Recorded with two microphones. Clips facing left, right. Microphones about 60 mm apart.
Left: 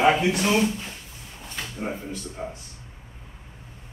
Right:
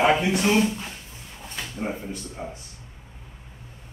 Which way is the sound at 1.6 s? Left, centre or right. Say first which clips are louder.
Right 1 dB; centre.